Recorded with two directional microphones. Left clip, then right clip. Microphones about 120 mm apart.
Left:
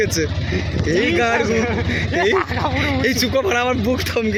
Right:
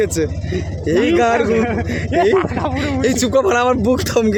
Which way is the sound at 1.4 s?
75° right (ahead or behind).